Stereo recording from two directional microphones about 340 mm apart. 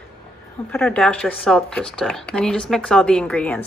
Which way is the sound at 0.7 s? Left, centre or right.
Centre.